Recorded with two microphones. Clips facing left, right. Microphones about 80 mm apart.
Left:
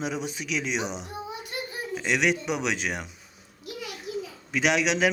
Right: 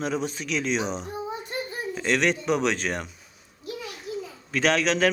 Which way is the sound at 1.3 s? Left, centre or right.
Right.